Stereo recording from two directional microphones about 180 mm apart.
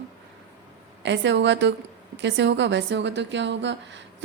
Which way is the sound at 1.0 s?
75° right (ahead or behind).